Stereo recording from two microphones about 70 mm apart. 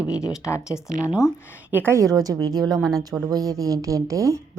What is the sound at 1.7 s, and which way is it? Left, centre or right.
Speech, right.